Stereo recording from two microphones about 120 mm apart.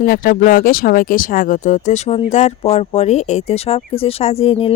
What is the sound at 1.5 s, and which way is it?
Speech, 90° left.